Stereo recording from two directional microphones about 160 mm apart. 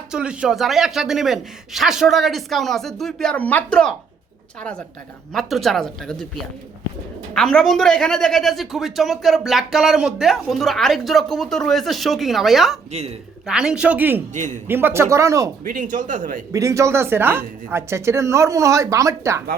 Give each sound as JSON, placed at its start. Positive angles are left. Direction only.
{"t": 0.1, "sound": "speech", "side_deg": -5}
{"t": 5.3, "sound": "speech", "side_deg": 0}
{"t": 14.3, "sound": "a man's voice", "side_deg": -50}
{"t": 14.7, "sound": "speech", "side_deg": -15}
{"t": 15.6, "sound": "a man's voice", "side_deg": -55}
{"t": 16.5, "sound": "speech", "side_deg": -20}